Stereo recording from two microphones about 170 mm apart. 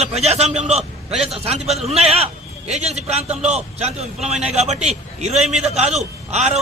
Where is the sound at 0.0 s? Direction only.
40° right (ahead or behind).